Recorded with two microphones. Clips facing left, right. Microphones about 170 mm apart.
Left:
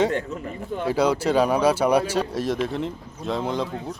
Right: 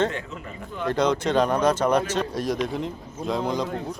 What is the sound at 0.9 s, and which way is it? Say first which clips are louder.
Speech: left 1 dB; 5° left (ahead or behind).